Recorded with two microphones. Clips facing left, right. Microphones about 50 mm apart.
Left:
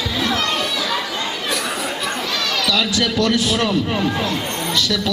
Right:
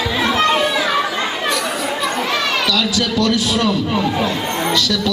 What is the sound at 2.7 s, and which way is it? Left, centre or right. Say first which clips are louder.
Music: right 1 dB; centre.